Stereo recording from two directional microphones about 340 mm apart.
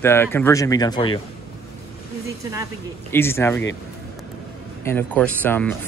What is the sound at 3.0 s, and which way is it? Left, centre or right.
Speech, centre.